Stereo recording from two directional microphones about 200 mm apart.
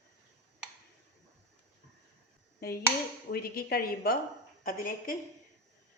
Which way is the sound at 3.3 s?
50° left (ahead or behind).